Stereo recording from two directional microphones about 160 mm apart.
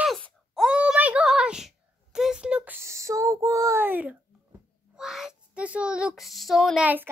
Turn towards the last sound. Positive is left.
turn(degrees=-10)  # may be behind; listen again after turning